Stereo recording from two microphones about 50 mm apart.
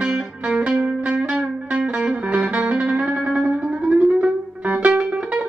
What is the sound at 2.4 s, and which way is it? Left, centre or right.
Music, right.